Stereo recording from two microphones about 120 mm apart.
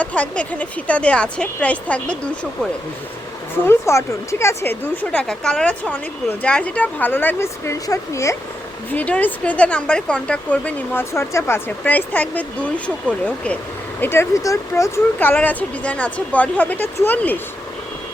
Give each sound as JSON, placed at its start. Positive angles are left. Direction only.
{"t": 0.0, "sound": "speech", "side_deg": 10}
{"t": 3.7, "sound": "speech", "side_deg": 25}
{"t": 5.1, "sound": "speech", "side_deg": 5}
{"t": 8.9, "sound": "speech", "side_deg": 10}
{"t": 14.0, "sound": "speech", "side_deg": 20}